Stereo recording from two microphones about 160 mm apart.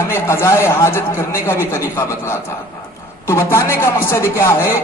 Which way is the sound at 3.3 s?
15° left (ahead or behind).